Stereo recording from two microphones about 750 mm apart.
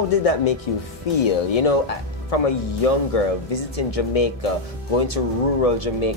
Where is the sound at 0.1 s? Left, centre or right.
Left.